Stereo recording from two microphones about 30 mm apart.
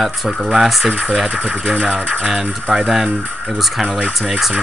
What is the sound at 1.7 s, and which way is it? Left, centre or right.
Speech, right.